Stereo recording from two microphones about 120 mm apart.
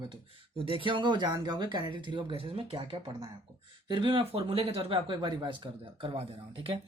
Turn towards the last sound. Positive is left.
turn(degrees=-50)  # may be behind; listen again after turning